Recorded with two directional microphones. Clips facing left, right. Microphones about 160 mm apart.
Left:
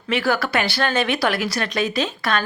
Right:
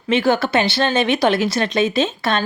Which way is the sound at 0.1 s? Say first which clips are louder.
Right 4 dB; 20° right (ahead or behind).